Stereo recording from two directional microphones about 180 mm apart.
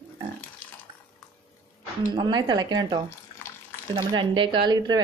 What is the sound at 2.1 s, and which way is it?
A woman's voice, 25° right (ahead or behind).